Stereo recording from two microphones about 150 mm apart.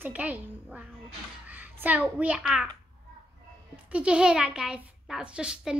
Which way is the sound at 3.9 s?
5° right (ahead or behind).